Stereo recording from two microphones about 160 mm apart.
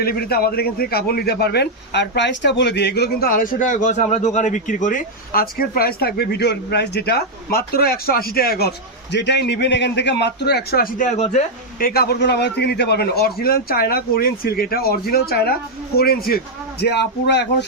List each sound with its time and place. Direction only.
0.0 s a man's voice: 70° left (ahead or behind)
9.1 s a man's voice: 90° left; by 11.4 s 45° left (ahead or behind)
11.8 s a man's voice: 70° left (ahead or behind)
16.8 s a man's voice: 90° left